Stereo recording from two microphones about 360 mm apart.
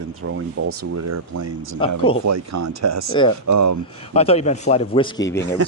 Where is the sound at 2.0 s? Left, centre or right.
Centre.